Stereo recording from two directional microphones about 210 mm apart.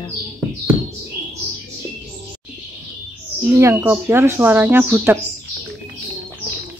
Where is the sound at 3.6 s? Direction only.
10° right (ahead or behind).